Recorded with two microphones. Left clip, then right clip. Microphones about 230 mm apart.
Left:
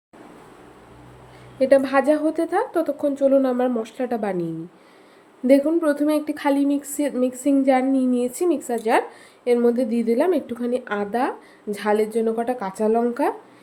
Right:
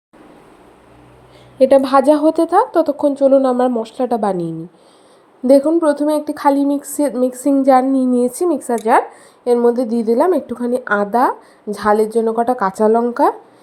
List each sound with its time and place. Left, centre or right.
1.5 s speech: right
9.6 s a woman's voice: centre
10.1 s speech: centre